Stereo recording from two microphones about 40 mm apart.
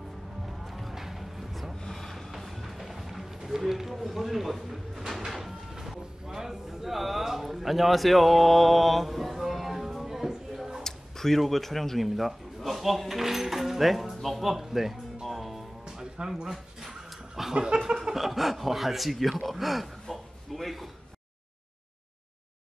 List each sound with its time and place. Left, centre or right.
0.5 s music: centre
3.4 s a sound: centre
10.8 s speech: centre
15.9 s music: centre
16.4 s dog: centre
18.1 s speech: centre